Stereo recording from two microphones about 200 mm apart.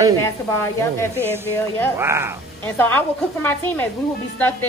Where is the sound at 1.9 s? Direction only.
10° right (ahead or behind).